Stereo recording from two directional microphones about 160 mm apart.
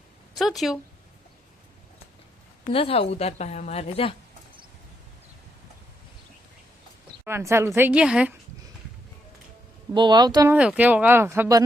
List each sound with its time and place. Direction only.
0.3 s speech: centre (ahead or behind)
2.7 s a woman's voice: 35° left (ahead or behind)
7.3 s speech: 15° right (ahead or behind)
9.9 s speech: 30° right (ahead or behind)
10.5 s speech: 10° right (ahead or behind)